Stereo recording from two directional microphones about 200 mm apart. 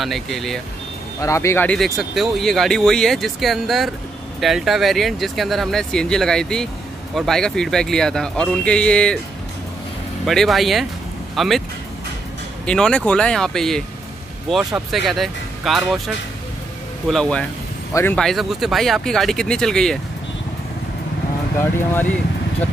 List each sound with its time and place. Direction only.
0.0 s speech: centre (ahead or behind)
1.2 s speech: 15° left (ahead or behind)
10.2 s speech: centre (ahead or behind)
12.6 s speech: 5° left (ahead or behind)
17.1 s speech: 5° left (ahead or behind)